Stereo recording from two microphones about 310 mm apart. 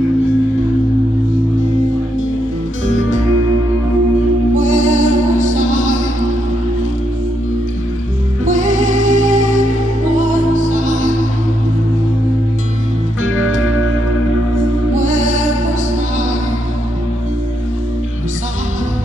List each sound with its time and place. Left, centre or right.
4.6 s music: right
8.5 s music: right
15.0 s music: right